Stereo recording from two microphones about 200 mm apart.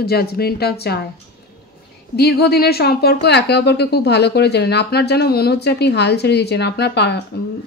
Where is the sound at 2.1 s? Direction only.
55° left (ahead or behind).